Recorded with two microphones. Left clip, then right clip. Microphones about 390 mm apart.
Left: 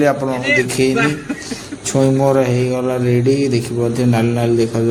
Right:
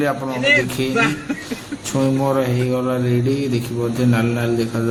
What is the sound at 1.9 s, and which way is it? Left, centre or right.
Speech, right.